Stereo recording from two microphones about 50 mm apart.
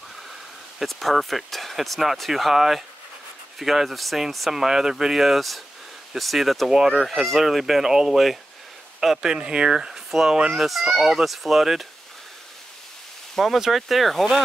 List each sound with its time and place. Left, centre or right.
0.7 s speech: centre
6.7 s speech: centre
7.1 s speech: centre
10.6 s speech: centre
13.4 s speech: centre